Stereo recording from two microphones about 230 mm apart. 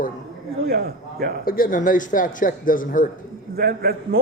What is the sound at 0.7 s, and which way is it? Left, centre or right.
Speech, right.